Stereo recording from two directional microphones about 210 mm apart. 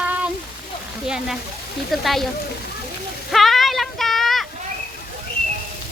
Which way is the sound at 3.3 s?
Centre (ahead or behind).